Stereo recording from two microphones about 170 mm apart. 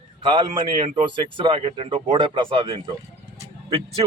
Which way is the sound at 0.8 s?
30° right (ahead or behind).